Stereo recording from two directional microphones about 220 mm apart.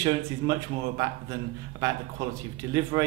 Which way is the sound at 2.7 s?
20° right (ahead or behind).